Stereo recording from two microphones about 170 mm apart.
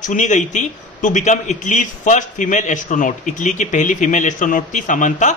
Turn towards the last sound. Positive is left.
turn(degrees=50)  # may be behind; listen again after turning